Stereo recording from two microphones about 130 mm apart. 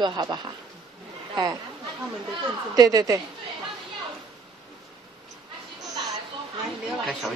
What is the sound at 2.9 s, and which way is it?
Speech, 30° right (ahead or behind).